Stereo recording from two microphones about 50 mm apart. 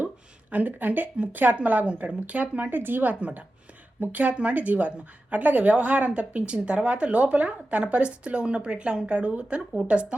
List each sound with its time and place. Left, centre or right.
0.5 s a woman's voice: right
2.6 s a woman's voice: right